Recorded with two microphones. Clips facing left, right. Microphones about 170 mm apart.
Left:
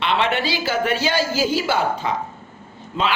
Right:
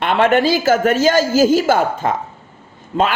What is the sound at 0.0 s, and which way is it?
A woman's voice, 50° right (ahead or behind).